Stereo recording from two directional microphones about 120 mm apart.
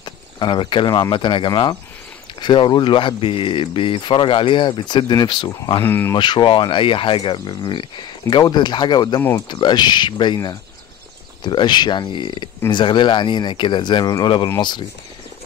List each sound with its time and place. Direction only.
0.0 s a sound: 40° left (ahead or behind)
1.1 s speech: 40° left (ahead or behind)
5.8 s speech: 20° left (ahead or behind)
6.1 s speech: 40° left (ahead or behind)